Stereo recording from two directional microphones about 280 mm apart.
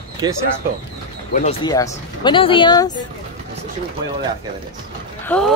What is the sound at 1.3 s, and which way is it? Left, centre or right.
Speech, left.